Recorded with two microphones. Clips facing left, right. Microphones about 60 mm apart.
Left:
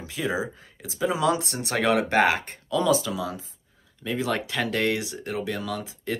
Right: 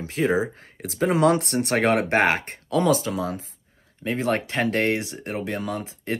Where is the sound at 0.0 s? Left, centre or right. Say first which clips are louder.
Right 6 dB; right.